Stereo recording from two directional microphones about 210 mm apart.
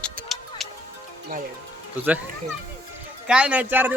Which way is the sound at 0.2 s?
45° right (ahead or behind).